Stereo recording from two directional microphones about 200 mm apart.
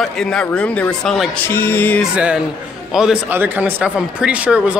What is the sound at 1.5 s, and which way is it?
Music, 10° left (ahead or behind).